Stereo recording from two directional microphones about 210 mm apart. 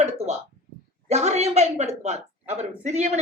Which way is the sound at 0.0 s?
30° right (ahead or behind).